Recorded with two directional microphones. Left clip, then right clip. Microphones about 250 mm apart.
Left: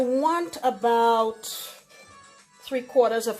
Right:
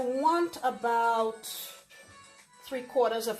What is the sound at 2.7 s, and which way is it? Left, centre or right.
Speech, left.